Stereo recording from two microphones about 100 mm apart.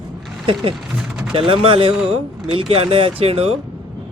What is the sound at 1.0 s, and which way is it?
Mechanisms, 5° right (ahead or behind).